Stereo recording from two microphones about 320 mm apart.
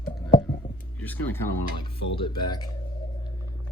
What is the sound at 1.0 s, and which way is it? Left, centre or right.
Speech, centre.